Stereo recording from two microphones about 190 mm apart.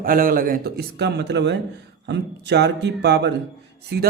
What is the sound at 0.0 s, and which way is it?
Speech, 50° right (ahead or behind).